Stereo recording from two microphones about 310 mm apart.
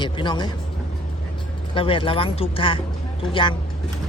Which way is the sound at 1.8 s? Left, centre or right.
Centre.